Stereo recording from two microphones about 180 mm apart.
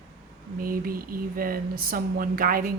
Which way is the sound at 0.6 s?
55° right (ahead or behind).